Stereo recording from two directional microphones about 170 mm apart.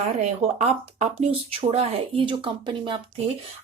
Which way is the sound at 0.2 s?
40° right (ahead or behind).